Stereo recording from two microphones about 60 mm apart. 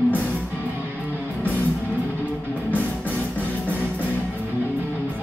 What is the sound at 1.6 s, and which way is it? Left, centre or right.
Music, left.